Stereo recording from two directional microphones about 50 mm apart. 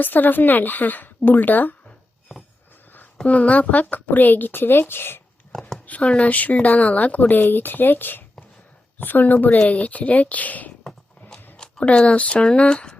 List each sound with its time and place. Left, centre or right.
0.0 s speech: left
3.2 s speech: left
5.5 s a sound: centre
5.8 s speech: left
11.5 s a sound: centre
11.9 s speech: left